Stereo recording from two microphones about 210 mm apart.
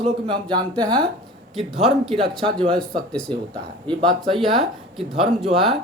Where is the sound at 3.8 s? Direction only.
20° right (ahead or behind).